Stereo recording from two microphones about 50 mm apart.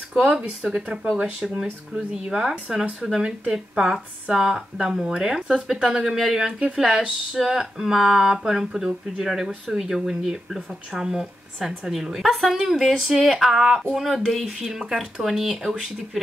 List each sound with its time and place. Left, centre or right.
0.6 s speech: centre
1.4 s speech: centre
6.4 s a woman's voice: centre